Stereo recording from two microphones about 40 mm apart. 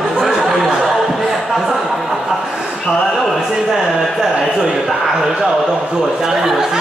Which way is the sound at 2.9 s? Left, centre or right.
Centre.